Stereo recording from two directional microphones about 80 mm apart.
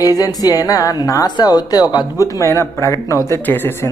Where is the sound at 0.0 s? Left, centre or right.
Left.